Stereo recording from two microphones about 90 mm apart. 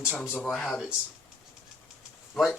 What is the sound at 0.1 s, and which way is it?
Speech, 15° left (ahead or behind).